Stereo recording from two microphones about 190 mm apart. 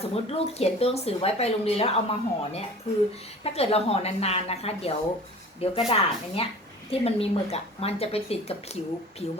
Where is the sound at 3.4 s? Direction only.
30° left (ahead or behind).